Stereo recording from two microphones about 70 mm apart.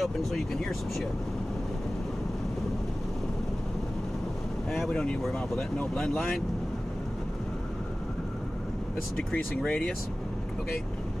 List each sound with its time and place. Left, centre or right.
0.0 s speech: centre
4.6 s speech: centre
9.1 s speech: centre